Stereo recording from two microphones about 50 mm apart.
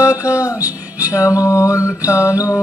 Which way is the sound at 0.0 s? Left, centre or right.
Left.